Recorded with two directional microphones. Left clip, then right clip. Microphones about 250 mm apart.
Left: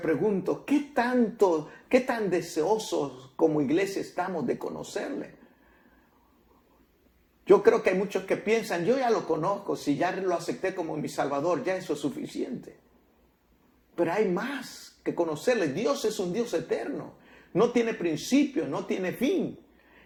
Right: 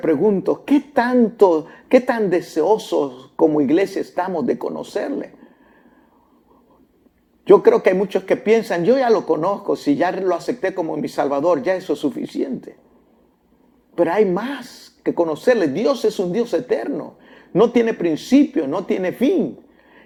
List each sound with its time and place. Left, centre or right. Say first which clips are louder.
0.0 s speech: right 10 dB; right
7.4 s speech: right 9 dB; right
13.9 s speech: right 10 dB; right